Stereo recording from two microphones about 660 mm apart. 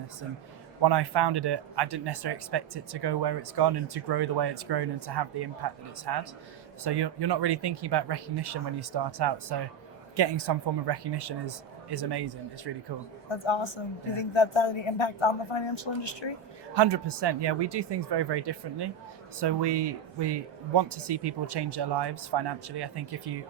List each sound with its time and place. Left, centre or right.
0.8 s speech: right
13.2 s a woman's voice: left
16.7 s speech: right